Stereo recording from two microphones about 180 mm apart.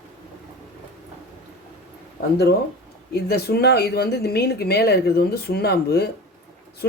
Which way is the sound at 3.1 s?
60° left (ahead or behind).